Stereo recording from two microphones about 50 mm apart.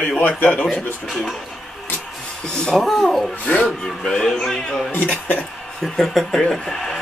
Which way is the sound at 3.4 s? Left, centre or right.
Left.